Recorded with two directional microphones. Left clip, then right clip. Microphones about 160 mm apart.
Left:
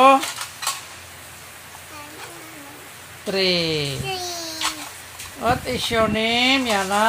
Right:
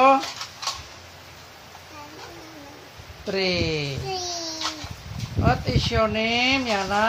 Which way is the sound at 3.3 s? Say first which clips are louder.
Left 4 dB; 30° left (ahead or behind).